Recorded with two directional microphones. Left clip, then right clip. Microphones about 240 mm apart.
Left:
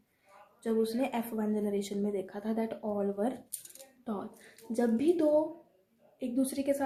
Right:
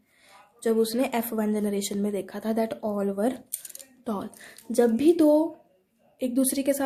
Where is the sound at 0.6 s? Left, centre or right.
Right.